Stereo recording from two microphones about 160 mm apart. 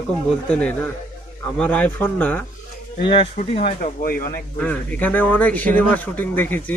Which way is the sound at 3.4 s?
55° left (ahead or behind).